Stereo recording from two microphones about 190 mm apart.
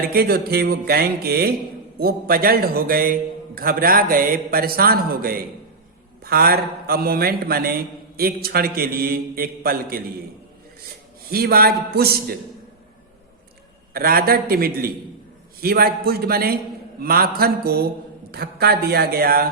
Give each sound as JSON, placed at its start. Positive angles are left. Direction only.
{"t": 0.0, "sound": "a man's voice", "side_deg": -55}
{"t": 11.3, "sound": "a man's voice", "side_deg": -50}
{"t": 13.9, "sound": "a man's voice", "side_deg": -50}